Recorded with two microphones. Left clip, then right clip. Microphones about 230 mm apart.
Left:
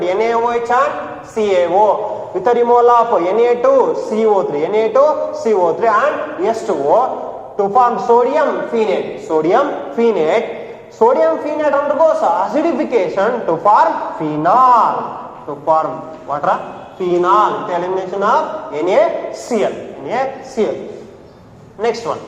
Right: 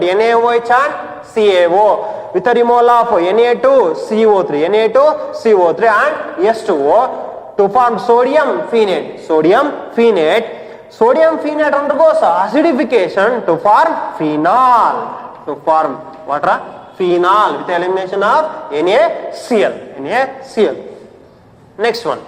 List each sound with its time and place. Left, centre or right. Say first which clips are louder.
0.0 s a man's voice: right 4 dB; right
21.8 s a man's voice: right 3 dB; right